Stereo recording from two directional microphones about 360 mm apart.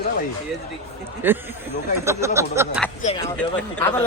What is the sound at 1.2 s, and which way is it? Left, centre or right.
Speech, centre.